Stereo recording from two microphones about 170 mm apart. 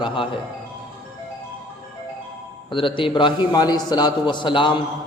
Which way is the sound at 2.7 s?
30° left (ahead or behind).